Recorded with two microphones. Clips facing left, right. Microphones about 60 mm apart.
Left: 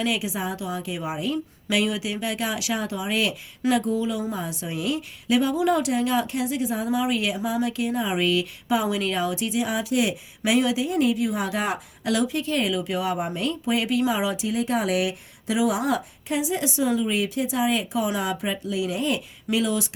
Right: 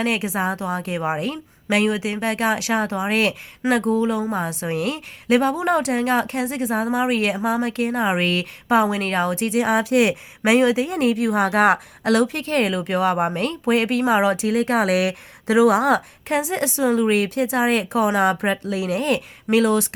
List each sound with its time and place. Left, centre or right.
0.0 s a woman's voice: right